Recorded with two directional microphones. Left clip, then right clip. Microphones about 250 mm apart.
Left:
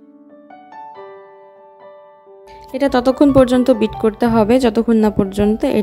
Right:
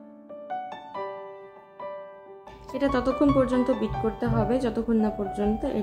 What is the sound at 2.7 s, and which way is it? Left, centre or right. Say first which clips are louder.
A woman's voice: left 10 dB; left.